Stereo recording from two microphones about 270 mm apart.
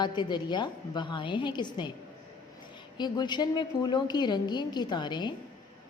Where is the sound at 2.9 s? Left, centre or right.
Centre.